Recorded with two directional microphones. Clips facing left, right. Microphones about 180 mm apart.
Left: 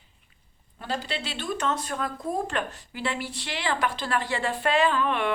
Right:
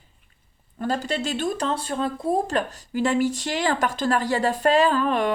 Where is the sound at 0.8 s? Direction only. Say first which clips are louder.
Right 6 dB; 45° right (ahead or behind).